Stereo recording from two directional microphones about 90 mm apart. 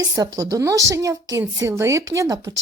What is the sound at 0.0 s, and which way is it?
A woman's voice, 40° right (ahead or behind).